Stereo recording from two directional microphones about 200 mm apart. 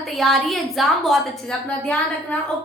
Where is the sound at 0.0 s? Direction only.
Centre (ahead or behind).